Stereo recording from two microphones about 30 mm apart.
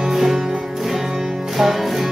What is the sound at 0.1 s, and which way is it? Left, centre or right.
Music, centre.